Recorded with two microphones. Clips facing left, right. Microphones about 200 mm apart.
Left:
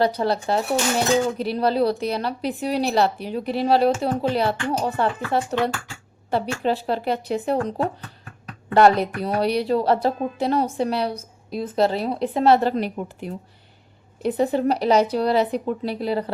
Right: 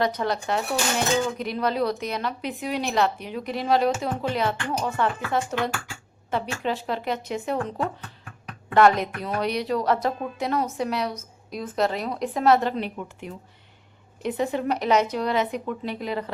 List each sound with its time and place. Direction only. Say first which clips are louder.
0.0 s speech: left 4 dB; 30° left (ahead or behind)